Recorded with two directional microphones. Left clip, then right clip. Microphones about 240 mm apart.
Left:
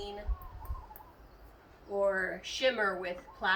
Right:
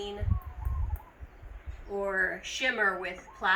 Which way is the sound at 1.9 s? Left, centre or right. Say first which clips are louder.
Right 1 dB; centre.